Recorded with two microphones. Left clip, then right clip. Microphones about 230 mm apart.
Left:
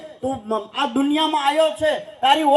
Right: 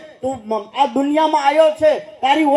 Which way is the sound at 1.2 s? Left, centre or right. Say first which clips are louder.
Right 6 dB; left.